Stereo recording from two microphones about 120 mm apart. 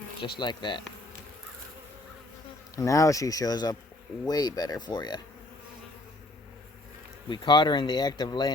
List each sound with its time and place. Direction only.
0.2 s speech: 40° left (ahead or behind)
2.7 s speech: 25° left (ahead or behind)
7.3 s speech: 40° left (ahead or behind)